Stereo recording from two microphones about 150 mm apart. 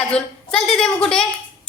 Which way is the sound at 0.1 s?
5° left (ahead or behind).